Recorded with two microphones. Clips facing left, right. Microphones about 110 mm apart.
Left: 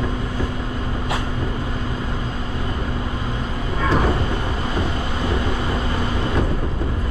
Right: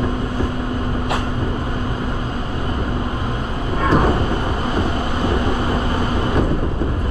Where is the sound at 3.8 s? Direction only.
35° right (ahead or behind).